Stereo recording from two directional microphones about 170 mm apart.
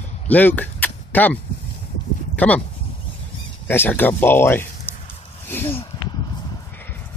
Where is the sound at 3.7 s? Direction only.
10° left (ahead or behind).